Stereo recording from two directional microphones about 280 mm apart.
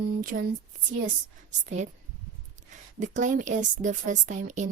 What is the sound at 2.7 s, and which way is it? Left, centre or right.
A woman's voice, right.